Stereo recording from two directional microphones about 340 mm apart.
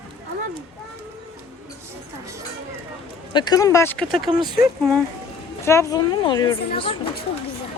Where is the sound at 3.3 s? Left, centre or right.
Centre.